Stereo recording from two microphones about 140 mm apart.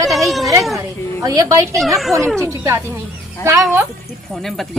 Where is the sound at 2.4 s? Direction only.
20° right (ahead or behind).